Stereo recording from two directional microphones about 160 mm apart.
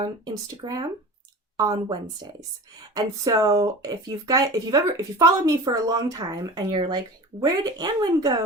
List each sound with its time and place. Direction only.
0.5 s a woman's voice: 25° right (ahead or behind)